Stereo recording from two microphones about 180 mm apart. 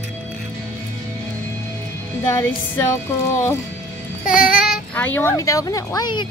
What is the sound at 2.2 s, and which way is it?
Speech, 15° left (ahead or behind).